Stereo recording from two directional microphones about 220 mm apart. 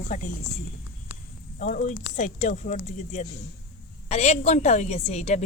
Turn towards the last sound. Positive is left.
turn(degrees=30)  # may be behind; listen again after turning